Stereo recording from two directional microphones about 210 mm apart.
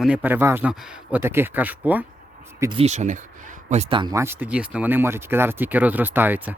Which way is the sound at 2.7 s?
30° right (ahead or behind).